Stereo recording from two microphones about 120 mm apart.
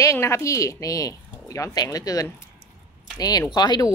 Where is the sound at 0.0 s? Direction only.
25° left (ahead or behind).